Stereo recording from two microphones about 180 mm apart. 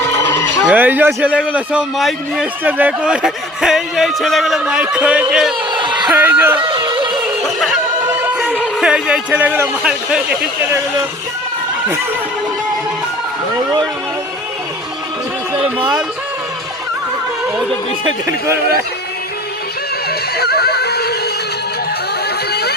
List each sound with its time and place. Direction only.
0.7 s a man's voice: 10° right (ahead or behind)
6.6 s a sound: 30° right (ahead or behind)
7.2 s snicker: centre (ahead or behind)
8.3 s music: 5° right (ahead or behind)
8.5 s a man's voice: 5° right (ahead or behind)
13.6 s speech: 20° right (ahead or behind)
18.3 s speech: 15° right (ahead or behind)
20.1 s neigh: 60° left (ahead or behind)